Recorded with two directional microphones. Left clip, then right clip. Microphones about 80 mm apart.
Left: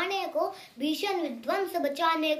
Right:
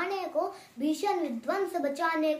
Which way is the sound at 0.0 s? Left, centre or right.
Right.